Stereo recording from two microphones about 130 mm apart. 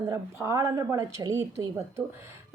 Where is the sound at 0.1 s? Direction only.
20° right (ahead or behind).